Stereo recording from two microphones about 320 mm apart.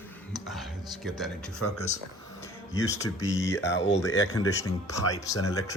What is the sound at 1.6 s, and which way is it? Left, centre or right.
Speech, left.